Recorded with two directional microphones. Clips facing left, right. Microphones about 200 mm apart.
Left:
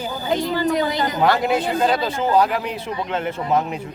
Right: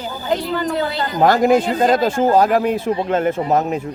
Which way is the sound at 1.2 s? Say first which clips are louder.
Right 7 dB; 45° right (ahead or behind).